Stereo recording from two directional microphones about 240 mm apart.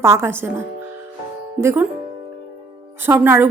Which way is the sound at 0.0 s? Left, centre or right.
Centre.